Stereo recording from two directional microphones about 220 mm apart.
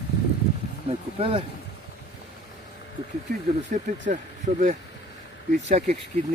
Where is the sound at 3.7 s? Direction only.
35° right (ahead or behind).